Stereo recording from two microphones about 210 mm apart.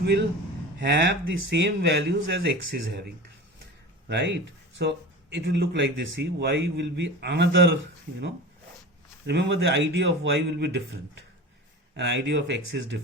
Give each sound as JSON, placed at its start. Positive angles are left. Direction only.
{"t": 0.0, "sound": "a man's voice", "side_deg": -55}
{"t": 4.1, "sound": "speech", "side_deg": -55}